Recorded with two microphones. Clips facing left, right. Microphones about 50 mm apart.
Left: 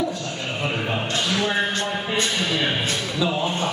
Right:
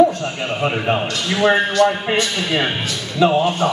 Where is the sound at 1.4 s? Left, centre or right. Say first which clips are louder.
Right 11 dB; right.